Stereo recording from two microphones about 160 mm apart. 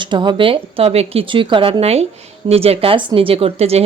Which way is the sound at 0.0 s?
30° right (ahead or behind).